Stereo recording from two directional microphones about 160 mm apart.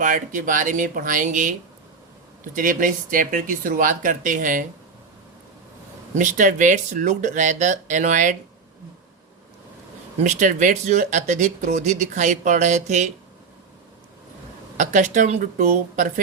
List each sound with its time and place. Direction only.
0.0 s speech: 55° right (ahead or behind)
6.1 s speech: 50° right (ahead or behind)
10.2 s speech: 50° right (ahead or behind)
14.8 s speech: 50° right (ahead or behind)